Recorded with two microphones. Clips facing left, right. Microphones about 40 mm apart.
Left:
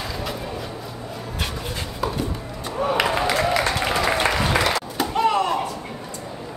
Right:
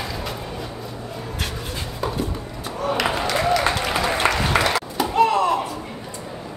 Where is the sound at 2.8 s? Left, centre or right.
Centre.